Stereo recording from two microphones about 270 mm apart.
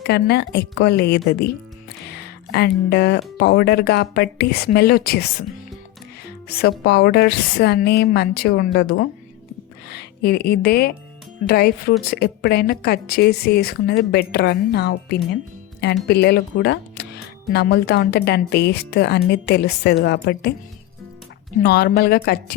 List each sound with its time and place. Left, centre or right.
0.1 s speech: left
6.5 s speech: left
21.6 s speech: left